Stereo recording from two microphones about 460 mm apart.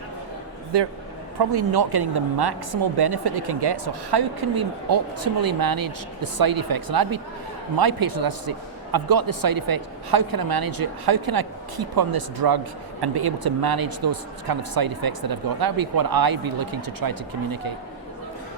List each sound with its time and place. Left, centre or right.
0.7 s a man's voice: right